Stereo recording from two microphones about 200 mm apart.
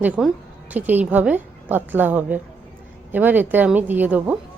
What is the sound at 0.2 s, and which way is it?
A woman's voice, 5° right (ahead or behind).